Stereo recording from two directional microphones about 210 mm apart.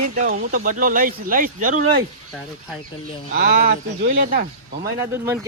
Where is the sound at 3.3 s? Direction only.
45° right (ahead or behind).